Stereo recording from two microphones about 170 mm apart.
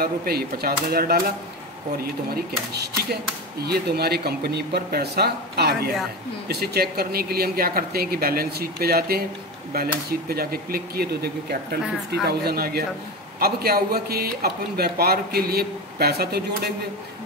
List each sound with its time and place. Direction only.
0.0 s speech: 65° right (ahead or behind)
2.3 s speech: 70° right (ahead or behind)